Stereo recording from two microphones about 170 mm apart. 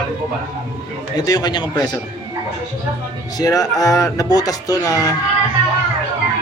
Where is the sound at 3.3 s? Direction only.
20° left (ahead or behind).